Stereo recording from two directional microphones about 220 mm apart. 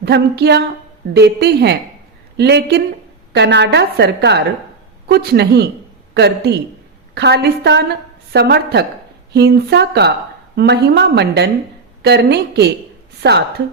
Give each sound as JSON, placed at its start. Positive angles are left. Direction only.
{"t": 0.0, "sound": "a woman's voice", "side_deg": -50}